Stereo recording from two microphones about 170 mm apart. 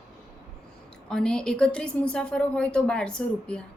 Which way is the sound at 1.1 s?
5° left (ahead or behind).